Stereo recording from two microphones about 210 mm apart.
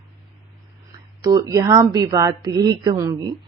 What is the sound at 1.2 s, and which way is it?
A woman's voice, 15° right (ahead or behind).